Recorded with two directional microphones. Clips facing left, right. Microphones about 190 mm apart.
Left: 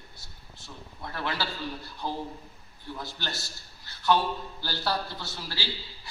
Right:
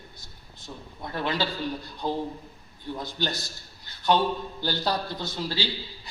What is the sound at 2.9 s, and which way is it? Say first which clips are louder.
Speech: right 6 dB; 20° right (ahead or behind).